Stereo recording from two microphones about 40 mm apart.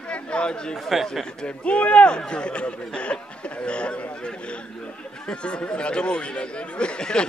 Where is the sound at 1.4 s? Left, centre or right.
Left.